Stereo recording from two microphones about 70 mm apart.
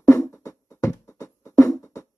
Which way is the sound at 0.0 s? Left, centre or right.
Left.